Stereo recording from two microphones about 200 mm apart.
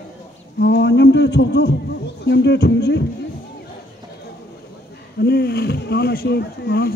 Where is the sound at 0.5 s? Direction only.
60° left (ahead or behind).